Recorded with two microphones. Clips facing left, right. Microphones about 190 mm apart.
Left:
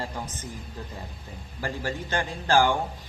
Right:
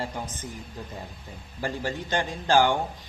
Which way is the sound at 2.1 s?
15° right (ahead or behind).